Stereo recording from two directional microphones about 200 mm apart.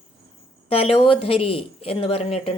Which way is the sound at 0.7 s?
30° left (ahead or behind).